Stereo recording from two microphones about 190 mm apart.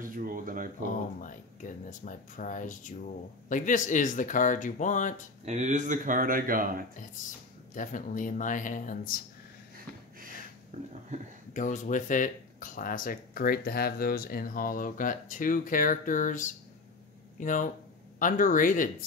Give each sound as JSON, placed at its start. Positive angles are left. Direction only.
{"t": 0.0, "sound": "a sound", "side_deg": -45}
{"t": 1.2, "sound": "speech", "side_deg": 40}
{"t": 5.4, "sound": "speech", "side_deg": -35}
{"t": 7.7, "sound": "speech", "side_deg": 40}
{"t": 10.7, "sound": "speech", "side_deg": -45}
{"t": 11.5, "sound": "speech", "side_deg": 40}